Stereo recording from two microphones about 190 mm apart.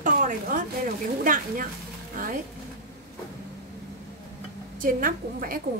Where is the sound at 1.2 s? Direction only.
45° right (ahead or behind).